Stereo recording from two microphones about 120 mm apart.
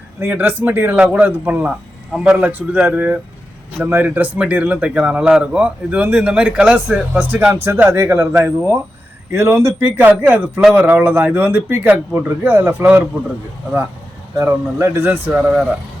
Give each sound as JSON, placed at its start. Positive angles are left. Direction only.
{"t": 0.2, "sound": "speech", "side_deg": -15}
{"t": 14.3, "sound": "speech", "side_deg": -20}